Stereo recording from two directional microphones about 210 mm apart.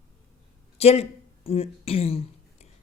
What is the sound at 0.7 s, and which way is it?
Speech, 30° left (ahead or behind).